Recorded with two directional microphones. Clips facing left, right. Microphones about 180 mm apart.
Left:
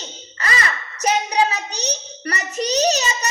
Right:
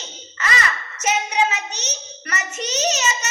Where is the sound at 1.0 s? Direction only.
35° left (ahead or behind).